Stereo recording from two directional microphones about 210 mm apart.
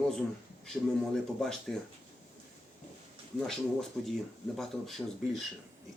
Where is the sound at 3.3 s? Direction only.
Centre (ahead or behind).